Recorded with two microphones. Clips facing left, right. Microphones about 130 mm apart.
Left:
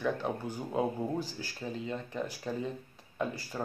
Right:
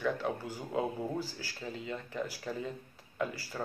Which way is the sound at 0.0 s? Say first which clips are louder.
Left 1 dB; 15° left (ahead or behind).